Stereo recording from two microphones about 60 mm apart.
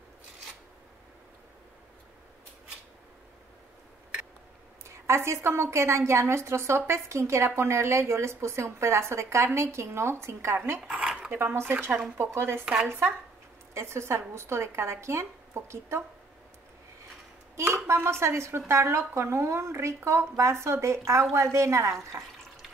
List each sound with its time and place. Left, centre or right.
4.8 s a woman's voice: right
10.9 s dishes: centre
11.3 s speech: right
12.7 s speech: centre
13.7 s a woman's voice: right
17.8 s a woman's voice: right